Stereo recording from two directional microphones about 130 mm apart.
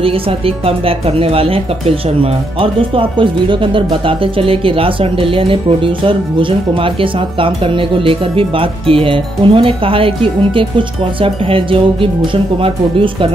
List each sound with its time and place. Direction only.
0.7 s speech: 45° right (ahead or behind)